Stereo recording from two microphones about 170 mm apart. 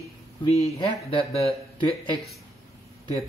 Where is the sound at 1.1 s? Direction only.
35° left (ahead or behind).